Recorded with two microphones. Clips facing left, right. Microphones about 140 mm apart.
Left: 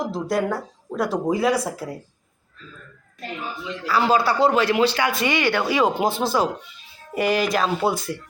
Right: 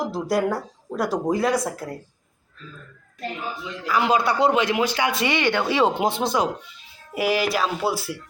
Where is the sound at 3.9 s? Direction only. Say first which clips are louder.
Left 1 dB; 15° right (ahead or behind).